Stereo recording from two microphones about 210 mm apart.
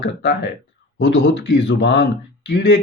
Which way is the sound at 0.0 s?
55° left (ahead or behind).